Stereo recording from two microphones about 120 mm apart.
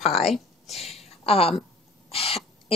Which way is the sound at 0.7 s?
60° left (ahead or behind).